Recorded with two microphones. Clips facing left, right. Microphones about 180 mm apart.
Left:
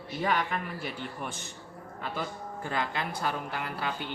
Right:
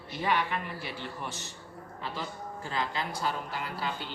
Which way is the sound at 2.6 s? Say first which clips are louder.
Left 1 dB; 55° left (ahead or behind).